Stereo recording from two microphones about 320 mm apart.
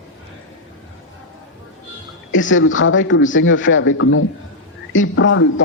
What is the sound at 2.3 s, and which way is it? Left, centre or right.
A man's voice, left.